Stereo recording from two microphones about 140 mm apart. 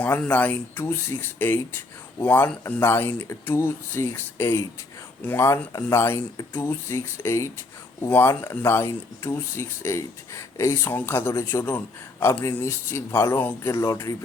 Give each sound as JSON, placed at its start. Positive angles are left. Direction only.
{"t": 0.0, "sound": "speech", "side_deg": 10}